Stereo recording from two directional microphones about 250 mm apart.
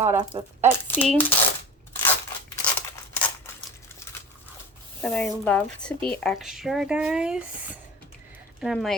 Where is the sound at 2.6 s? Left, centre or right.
Centre.